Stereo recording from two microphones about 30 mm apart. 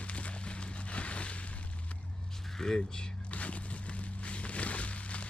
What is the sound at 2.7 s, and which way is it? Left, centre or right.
Speech, left.